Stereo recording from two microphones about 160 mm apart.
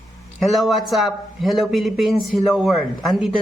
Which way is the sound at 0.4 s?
Centre (ahead or behind).